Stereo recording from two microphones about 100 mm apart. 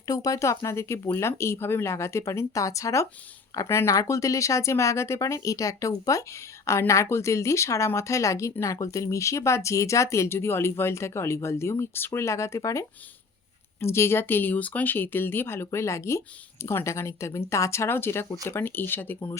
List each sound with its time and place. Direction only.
0.1 s speech: 35° left (ahead or behind); by 19.3 s 20° left (ahead or behind)